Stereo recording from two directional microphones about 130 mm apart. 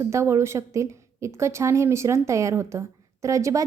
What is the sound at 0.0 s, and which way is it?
Speech, 20° right (ahead or behind).